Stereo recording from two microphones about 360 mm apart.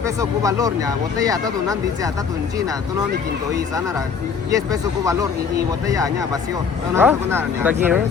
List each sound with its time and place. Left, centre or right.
0.2 s speech: centre
4.5 s speech: centre